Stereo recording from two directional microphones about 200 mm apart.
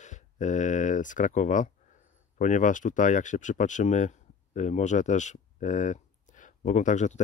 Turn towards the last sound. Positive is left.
turn(degrees=35)  # may be behind; listen again after turning